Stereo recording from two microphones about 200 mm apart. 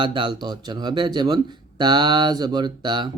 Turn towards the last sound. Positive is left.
turn(degrees=-20)  # may be behind; listen again after turning